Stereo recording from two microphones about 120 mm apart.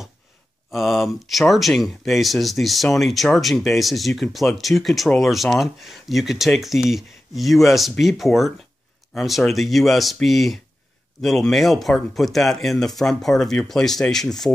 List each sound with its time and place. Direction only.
0.7 s speech: centre (ahead or behind)